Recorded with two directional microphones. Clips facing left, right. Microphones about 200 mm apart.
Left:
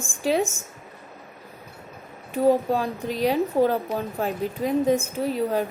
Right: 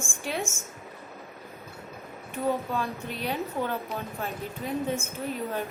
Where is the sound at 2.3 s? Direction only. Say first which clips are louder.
Left 8 dB; 35° left (ahead or behind).